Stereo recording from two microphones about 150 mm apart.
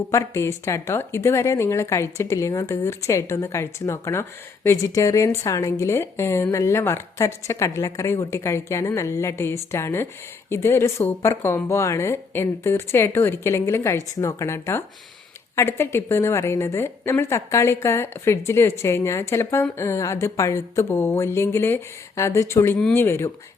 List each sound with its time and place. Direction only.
0.1 s a woman's voice: 20° left (ahead or behind)